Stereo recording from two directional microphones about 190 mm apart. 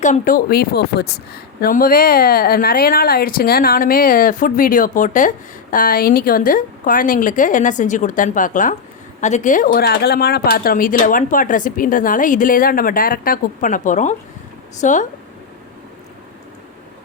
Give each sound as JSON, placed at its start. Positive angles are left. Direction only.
{"t": 0.0, "sound": "speech", "side_deg": 45}
{"t": 1.6, "sound": "speech", "side_deg": 50}